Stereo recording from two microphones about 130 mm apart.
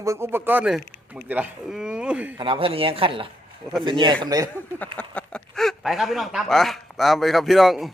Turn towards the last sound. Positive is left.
turn(degrees=0)  # may be behind; listen again after turning